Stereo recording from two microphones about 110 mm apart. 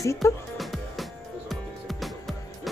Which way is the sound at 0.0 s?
30° left (ahead or behind).